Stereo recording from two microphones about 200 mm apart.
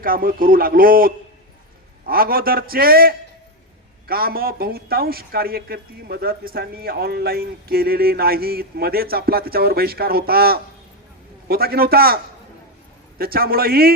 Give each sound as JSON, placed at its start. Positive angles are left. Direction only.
{"t": 0.0, "sound": "speech", "side_deg": -45}